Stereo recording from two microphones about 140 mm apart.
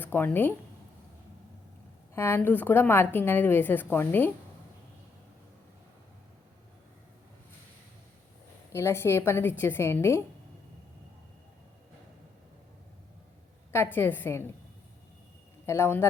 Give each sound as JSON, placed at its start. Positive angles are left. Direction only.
{"t": 0.0, "sound": "speech", "side_deg": 15}
{"t": 2.1, "sound": "a woman's voice", "side_deg": 15}
{"t": 8.7, "sound": "a woman's voice", "side_deg": 20}
{"t": 13.7, "sound": "a woman's voice", "side_deg": 15}
{"t": 15.6, "sound": "a woman's voice", "side_deg": 20}